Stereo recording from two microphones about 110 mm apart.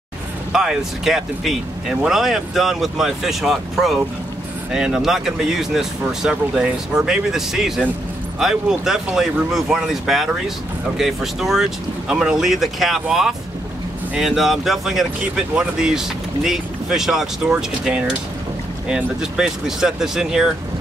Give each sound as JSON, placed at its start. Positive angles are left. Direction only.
{"t": 0.5, "sound": "speech", "side_deg": -5}